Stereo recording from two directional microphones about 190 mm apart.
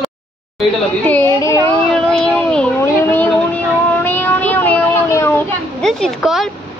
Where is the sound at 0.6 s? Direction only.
10° left (ahead or behind).